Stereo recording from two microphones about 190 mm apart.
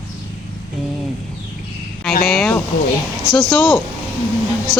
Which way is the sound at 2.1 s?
50° left (ahead or behind).